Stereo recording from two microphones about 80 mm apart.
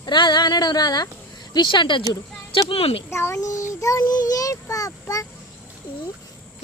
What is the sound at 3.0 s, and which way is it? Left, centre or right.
A child's voice, left.